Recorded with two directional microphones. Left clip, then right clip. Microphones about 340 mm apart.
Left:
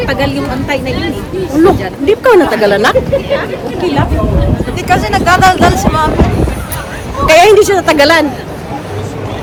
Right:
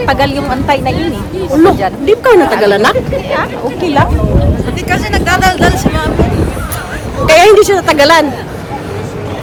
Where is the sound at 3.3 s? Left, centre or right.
Centre.